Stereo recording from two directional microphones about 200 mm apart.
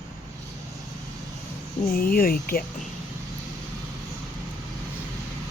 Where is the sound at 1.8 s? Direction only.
45° left (ahead or behind).